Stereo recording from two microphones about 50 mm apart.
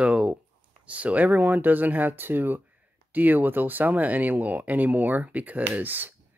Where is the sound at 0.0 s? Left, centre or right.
Right.